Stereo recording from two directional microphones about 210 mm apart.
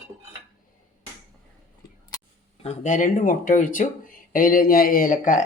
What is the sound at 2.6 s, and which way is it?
Speech, 35° left (ahead or behind).